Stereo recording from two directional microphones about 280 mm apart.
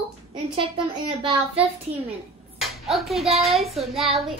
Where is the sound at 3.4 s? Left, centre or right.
Centre.